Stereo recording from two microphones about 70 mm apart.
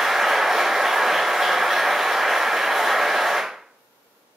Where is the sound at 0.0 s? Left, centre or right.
Centre.